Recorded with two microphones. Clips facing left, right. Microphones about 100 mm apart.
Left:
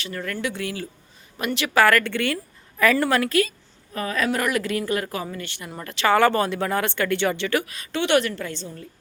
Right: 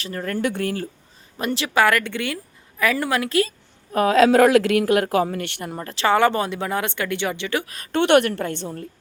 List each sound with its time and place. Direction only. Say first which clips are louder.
0.0 s speech: right 4 dB; 35° right (ahead or behind)
1.4 s a woman's voice: right 1 dB; 30° right (ahead or behind)
1.7 s a woman's voice: left 1 dB; 15° right (ahead or behind)
3.2 s a woman's voice: right 1 dB; 25° right (ahead or behind)
3.9 s speech: right 10 dB; 85° right; by 5.7 s 60° right (ahead or behind)
5.7 s a woman's voice: right 1 dB; 30° right (ahead or behind)
6.1 s a woman's voice: left 1 dB; 20° right (ahead or behind)
7.6 s a woman's voice: right 5 dB; 40° right (ahead or behind); by 8.9 s 60° right (ahead or behind)